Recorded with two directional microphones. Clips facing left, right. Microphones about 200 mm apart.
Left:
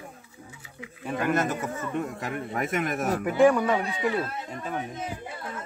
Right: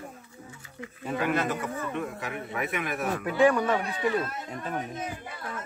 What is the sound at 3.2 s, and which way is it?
Speech, 5° left (ahead or behind).